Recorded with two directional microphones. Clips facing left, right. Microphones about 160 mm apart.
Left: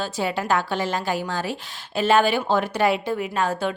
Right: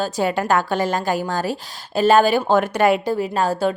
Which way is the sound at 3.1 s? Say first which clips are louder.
Right 4 dB; 35° right (ahead or behind).